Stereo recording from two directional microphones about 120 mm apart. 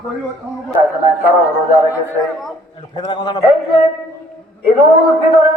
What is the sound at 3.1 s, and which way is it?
Speech, 40° left (ahead or behind).